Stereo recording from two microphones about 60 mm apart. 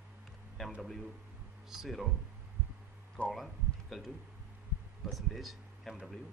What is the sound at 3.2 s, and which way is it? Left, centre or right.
Speech, centre.